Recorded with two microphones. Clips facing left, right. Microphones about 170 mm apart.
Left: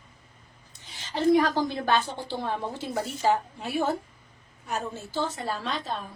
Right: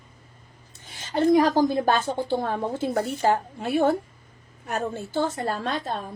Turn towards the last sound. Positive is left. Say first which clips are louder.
# right 3 dB
turn(degrees=-50)  # may be behind; listen again after turning